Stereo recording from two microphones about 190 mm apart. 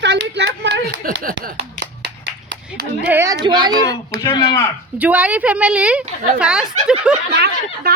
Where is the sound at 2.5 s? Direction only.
65° right (ahead or behind).